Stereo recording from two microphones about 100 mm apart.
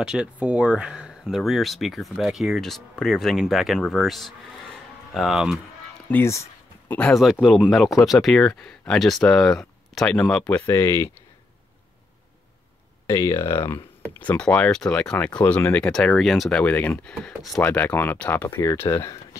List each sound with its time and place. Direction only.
0.0 s speech: 10° right (ahead or behind)
6.1 s speech: 10° left (ahead or behind)
7.2 s speech: 5° right (ahead or behind)
10.6 s speech: 25° left (ahead or behind)
13.0 s speech: 30° left (ahead or behind)
14.3 s speech: 10° left (ahead or behind)
17.1 s speech: centre (ahead or behind)
17.6 s speech: 15° left (ahead or behind)
18.8 s speech: 30° left (ahead or behind)